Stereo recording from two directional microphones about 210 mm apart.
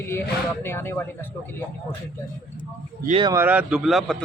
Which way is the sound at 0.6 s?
10° left (ahead or behind).